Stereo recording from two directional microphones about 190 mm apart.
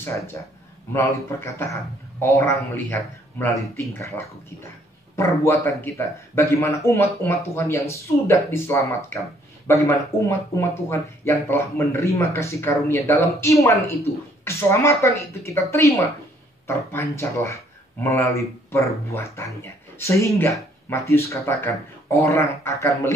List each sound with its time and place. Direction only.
0.0 s speech: 15° left (ahead or behind)
1.6 s speech: 15° left (ahead or behind)
5.1 s speech: 15° left (ahead or behind)